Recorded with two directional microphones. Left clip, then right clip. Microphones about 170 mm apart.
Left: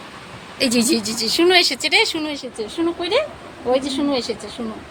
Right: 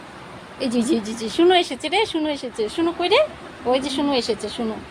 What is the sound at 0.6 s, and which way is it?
A woman's voice, 5° right (ahead or behind).